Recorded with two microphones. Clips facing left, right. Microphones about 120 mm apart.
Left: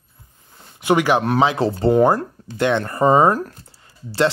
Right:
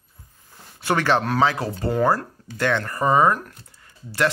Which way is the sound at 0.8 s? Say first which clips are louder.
Left 4 dB; 15° left (ahead or behind).